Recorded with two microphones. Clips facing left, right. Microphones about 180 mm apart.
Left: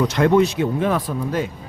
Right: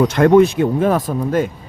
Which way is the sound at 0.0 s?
50° right (ahead or behind).